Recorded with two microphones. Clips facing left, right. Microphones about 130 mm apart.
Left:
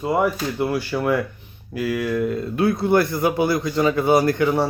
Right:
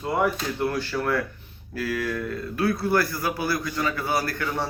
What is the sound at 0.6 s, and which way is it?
A man's voice, 10° left (ahead or behind).